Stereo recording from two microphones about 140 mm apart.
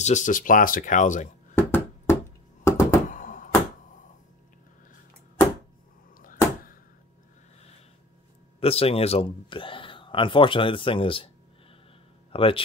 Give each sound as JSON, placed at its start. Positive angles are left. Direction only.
{"t": 0.0, "sound": "speech", "side_deg": 60}
{"t": 1.5, "sound": "a sound", "side_deg": 15}
{"t": 2.6, "sound": "knock", "side_deg": 20}
{"t": 3.1, "sound": "a sound", "side_deg": 70}
{"t": 8.5, "sound": "speech", "side_deg": 45}
{"t": 12.3, "sound": "speech", "side_deg": 40}